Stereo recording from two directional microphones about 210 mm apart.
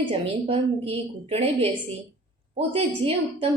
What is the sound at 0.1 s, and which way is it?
A woman's voice, 25° right (ahead or behind).